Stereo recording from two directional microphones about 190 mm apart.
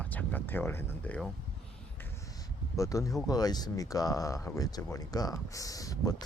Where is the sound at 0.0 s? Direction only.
10° left (ahead or behind).